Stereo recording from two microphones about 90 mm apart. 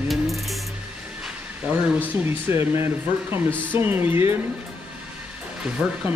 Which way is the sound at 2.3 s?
25° right (ahead or behind).